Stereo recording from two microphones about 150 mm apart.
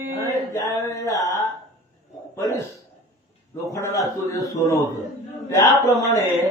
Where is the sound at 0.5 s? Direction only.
20° left (ahead or behind).